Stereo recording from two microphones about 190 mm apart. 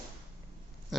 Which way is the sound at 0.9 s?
Centre (ahead or behind).